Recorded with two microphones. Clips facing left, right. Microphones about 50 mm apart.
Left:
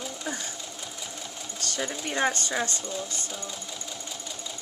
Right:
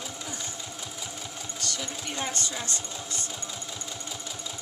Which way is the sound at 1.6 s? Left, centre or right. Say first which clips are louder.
Left 4 dB; left.